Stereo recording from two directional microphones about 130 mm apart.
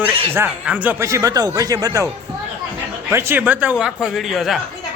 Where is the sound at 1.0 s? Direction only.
25° right (ahead or behind).